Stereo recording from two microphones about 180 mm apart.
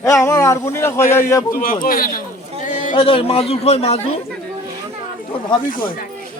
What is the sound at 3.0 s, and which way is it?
A man's voice, 30° left (ahead or behind).